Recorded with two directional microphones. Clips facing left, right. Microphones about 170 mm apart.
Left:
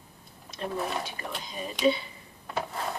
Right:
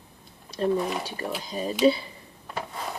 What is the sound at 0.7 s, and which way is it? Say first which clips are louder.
Speech: right 5 dB; centre (ahead or behind).